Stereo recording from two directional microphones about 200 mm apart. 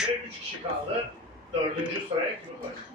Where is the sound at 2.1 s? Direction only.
25° right (ahead or behind).